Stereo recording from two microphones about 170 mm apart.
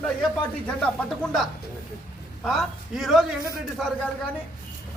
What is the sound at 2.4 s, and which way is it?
Speech, centre (ahead or behind).